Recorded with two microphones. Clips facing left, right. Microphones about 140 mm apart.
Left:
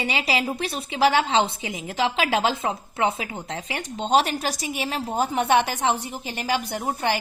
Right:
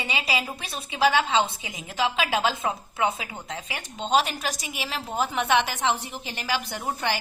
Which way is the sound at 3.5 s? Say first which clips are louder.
Left 3 dB; 30° left (ahead or behind).